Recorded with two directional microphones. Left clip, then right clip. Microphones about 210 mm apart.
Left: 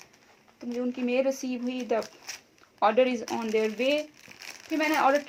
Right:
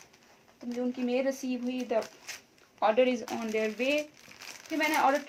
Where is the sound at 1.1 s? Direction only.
45° left (ahead or behind).